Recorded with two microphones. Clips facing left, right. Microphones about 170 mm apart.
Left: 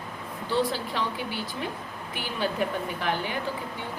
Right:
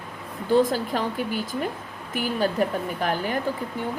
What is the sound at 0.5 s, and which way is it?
Speech, 45° right (ahead or behind).